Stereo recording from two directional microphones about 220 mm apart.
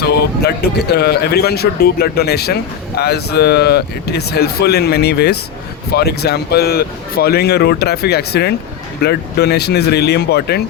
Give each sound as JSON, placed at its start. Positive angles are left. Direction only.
{"t": 0.0, "sound": "speech", "side_deg": 50}